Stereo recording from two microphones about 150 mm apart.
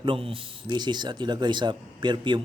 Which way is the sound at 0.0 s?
35° right (ahead or behind).